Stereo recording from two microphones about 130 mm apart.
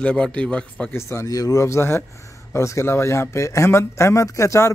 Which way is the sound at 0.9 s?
20° left (ahead or behind).